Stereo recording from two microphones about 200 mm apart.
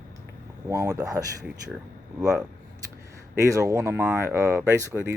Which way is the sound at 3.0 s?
15° right (ahead or behind).